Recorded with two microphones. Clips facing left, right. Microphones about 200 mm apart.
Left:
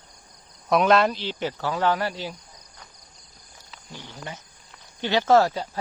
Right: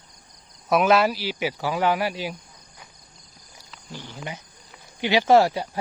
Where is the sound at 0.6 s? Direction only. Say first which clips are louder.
Even; 5° right (ahead or behind).